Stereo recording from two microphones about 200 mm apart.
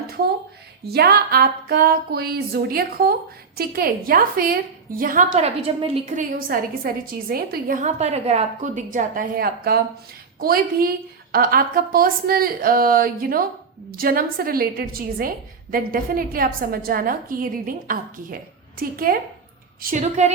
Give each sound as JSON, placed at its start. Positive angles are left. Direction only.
{"t": 0.9, "sound": "a woman's voice", "side_deg": -50}